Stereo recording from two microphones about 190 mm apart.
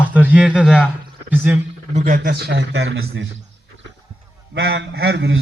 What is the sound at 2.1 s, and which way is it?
A man's voice, 55° right (ahead or behind).